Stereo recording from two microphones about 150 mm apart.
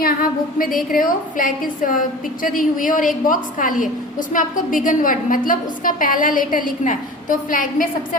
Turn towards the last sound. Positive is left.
turn(degrees=65)  # may be behind; listen again after turning